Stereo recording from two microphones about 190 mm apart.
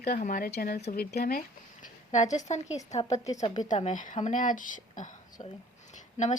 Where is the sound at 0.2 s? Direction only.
45° left (ahead or behind).